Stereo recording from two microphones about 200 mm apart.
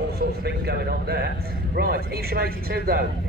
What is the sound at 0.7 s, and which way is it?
A man's voice, 55° right (ahead or behind).